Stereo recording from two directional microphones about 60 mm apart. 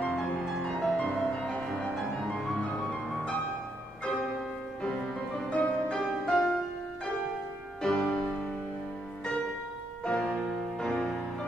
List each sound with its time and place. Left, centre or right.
0.1 s music: centre
5.5 s music: centre
7.8 s music: centre
10.0 s music: centre